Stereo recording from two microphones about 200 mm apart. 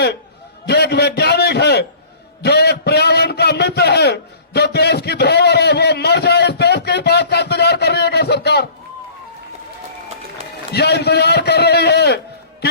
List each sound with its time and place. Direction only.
0.7 s a man's voice: 55° left (ahead or behind)
2.4 s a sound: 55° left (ahead or behind)
10.7 s a man's voice: 55° left (ahead or behind)